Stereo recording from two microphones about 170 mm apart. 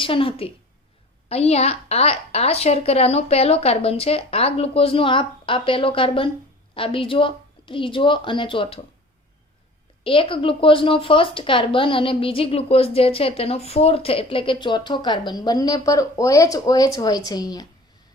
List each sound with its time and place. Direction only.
0.0 s speech: 30° left (ahead or behind)
10.0 s speech: 30° left (ahead or behind)